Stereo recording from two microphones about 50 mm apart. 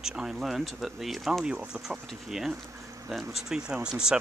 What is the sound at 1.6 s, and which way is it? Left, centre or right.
Speech, centre.